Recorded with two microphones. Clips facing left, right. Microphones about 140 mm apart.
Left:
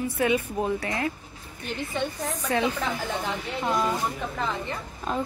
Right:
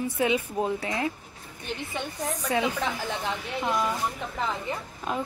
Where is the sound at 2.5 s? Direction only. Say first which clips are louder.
Left 1 dB; 15° right (ahead or behind).